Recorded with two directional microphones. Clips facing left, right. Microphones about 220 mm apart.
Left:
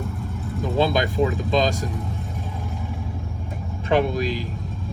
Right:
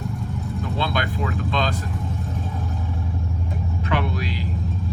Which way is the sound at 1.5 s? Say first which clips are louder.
Left 2 dB; 40° left (ahead or behind).